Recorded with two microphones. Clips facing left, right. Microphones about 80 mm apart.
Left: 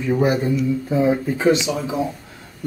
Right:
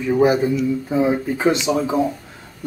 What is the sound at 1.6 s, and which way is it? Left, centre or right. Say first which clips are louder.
Speech: right 4 dB; right.